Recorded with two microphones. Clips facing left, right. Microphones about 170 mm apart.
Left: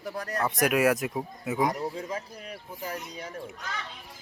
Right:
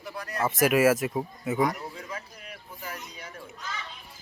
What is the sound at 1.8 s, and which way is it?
Speech, 35° left (ahead or behind).